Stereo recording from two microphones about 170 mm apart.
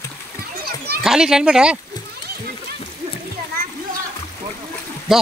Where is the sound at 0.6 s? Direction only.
70° right (ahead or behind).